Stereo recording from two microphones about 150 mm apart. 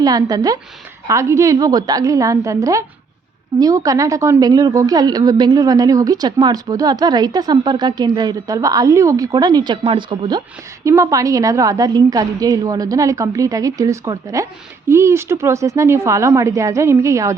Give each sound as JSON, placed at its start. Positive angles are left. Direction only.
{"t": 0.0, "sound": "speech", "side_deg": -25}
{"t": 10.8, "sound": "speech", "side_deg": -20}